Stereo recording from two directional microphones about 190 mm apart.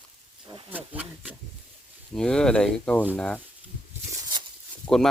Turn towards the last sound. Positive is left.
turn(degrees=0)  # may be behind; listen again after turning